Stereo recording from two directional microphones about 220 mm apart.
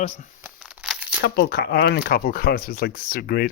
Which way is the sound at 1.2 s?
45° left (ahead or behind).